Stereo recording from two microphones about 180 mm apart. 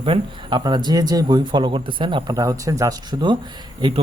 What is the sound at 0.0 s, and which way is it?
Speech, 30° right (ahead or behind).